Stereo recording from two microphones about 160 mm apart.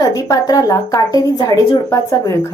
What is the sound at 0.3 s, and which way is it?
Speech, 20° left (ahead or behind).